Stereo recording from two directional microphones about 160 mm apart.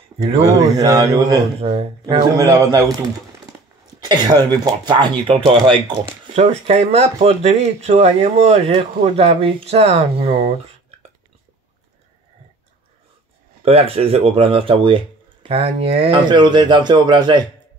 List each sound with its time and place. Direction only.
0.4 s speech: 20° right (ahead or behind)
1.6 s speech: 35° right (ahead or behind)
2.3 s speech: 20° right (ahead or behind)
4.0 s speech: 25° right (ahead or behind)
6.3 s speech: 40° right (ahead or behind)
13.6 s speech: 35° right (ahead or behind)